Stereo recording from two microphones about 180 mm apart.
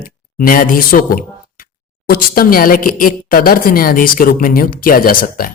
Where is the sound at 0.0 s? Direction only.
50° left (ahead or behind).